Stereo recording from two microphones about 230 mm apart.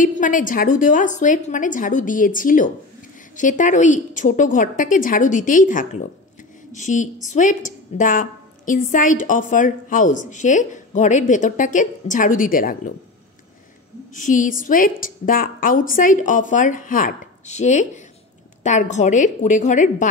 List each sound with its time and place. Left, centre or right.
0.0 s a woman's voice: left
14.1 s a woman's voice: left